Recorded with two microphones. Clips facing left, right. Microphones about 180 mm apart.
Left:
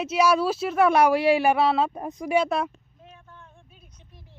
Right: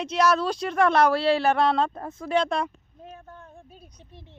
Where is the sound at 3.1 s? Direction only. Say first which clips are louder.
Right 6 dB; 45° right (ahead or behind).